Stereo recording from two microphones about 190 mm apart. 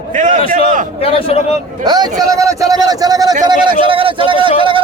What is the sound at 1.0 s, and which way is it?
Speech, 30° left (ahead or behind).